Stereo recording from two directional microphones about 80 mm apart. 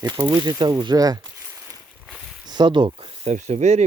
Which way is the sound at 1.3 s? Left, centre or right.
Right.